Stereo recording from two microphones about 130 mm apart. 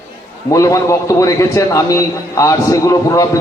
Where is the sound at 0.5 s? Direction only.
25° left (ahead or behind).